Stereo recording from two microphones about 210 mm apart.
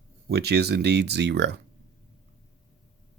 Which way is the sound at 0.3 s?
50° right (ahead or behind).